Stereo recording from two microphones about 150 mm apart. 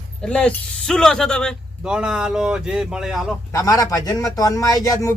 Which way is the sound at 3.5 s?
20° left (ahead or behind).